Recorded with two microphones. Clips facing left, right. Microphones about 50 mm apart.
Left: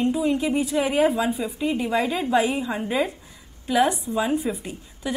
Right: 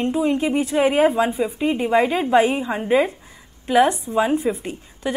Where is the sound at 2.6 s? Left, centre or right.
Right.